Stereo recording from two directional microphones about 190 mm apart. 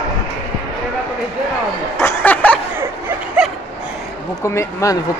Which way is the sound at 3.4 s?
5° right (ahead or behind).